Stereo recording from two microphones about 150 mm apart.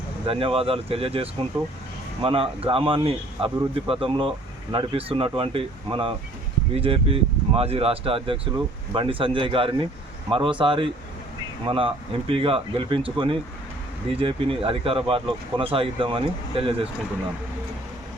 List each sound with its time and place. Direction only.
0.3 s speech: 40° right (ahead or behind)